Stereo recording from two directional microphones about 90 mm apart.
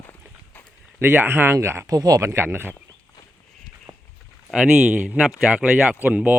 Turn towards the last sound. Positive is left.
turn(degrees=-15)  # may be behind; listen again after turning